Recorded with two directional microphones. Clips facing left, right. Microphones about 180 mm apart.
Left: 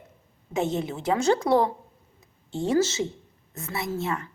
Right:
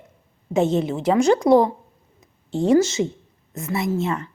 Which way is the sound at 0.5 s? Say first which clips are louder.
Right 7 dB; 20° right (ahead or behind).